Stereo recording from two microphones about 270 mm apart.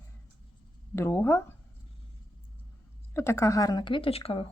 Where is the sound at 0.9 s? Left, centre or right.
Centre.